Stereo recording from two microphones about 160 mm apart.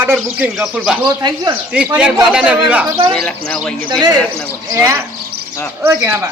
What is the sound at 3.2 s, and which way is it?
Speech, 5° left (ahead or behind).